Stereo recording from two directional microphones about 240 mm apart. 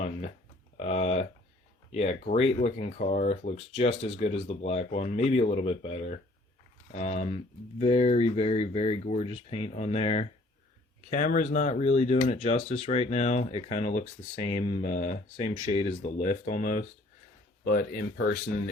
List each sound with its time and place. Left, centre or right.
0.0 s speech: left